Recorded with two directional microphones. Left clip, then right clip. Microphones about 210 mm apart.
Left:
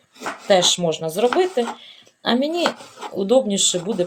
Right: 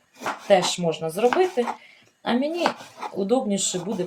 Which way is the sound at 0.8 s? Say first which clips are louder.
Left 4 dB; 35° left (ahead or behind).